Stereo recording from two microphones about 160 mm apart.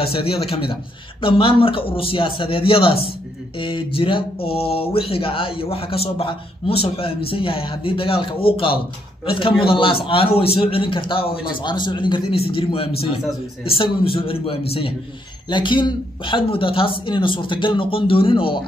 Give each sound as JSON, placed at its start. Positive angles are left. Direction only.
{"t": 0.0, "sound": "speech", "side_deg": 35}